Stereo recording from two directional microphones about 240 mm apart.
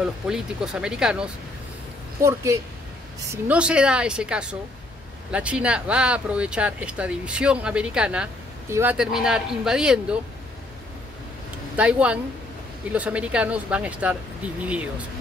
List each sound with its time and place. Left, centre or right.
0.0 s a woman's voice: centre
11.7 s speech: centre